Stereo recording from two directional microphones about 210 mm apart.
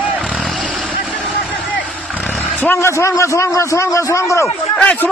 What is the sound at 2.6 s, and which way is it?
A man's voice, 10° left (ahead or behind).